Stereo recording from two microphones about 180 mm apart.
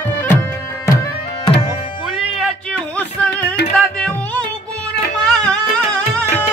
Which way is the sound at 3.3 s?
75° left (ahead or behind).